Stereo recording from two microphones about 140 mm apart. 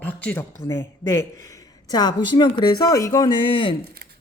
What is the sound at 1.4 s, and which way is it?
Mantra, 25° left (ahead or behind).